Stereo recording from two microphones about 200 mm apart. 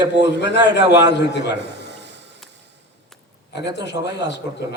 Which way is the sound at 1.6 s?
60° right (ahead or behind).